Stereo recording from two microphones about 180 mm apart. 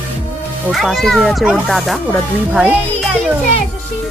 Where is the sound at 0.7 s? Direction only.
Centre (ahead or behind).